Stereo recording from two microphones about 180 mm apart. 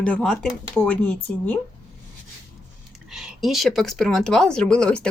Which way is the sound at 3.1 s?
Centre (ahead or behind).